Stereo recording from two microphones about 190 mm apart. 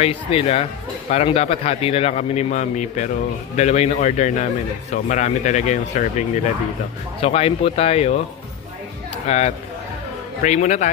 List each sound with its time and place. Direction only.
0.0 s a man's voice: 35° left (ahead or behind)
9.3 s a man's voice: 35° left (ahead or behind)